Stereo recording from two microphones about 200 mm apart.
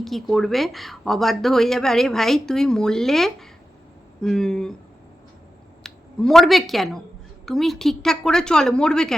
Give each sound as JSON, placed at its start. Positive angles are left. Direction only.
{"t": 0.0, "sound": "speech", "side_deg": 0}
{"t": 5.8, "sound": "speech", "side_deg": 0}